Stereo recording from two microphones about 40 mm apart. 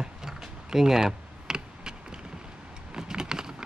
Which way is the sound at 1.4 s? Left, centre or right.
Centre.